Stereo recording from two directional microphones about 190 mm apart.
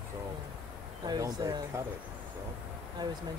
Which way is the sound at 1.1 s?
20° right (ahead or behind).